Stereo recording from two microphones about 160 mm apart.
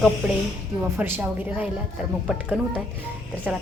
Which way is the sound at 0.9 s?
15° right (ahead or behind).